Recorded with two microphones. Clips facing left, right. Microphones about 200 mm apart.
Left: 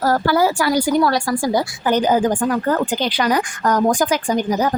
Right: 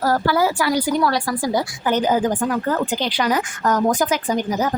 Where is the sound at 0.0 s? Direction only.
40° left (ahead or behind).